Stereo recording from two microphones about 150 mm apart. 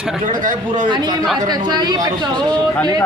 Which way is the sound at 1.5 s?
30° right (ahead or behind).